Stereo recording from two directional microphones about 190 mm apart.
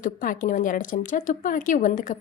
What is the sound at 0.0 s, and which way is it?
Speech, 45° left (ahead or behind).